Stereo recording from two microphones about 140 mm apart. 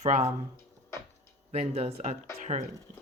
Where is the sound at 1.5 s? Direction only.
50° right (ahead or behind).